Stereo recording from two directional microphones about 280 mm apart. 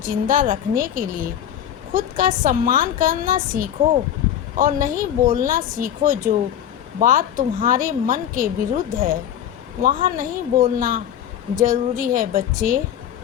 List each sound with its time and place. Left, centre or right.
0.0 s speech: right